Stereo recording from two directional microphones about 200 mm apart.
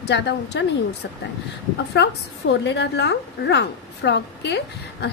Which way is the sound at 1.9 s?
60° left (ahead or behind).